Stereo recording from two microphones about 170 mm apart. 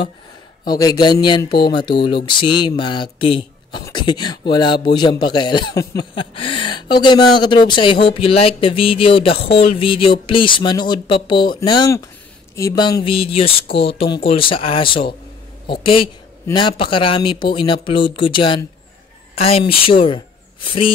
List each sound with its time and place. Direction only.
0.7 s a man's voice: 20° left (ahead or behind)